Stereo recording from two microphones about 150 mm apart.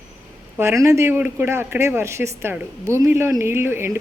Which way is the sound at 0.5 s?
20° right (ahead or behind).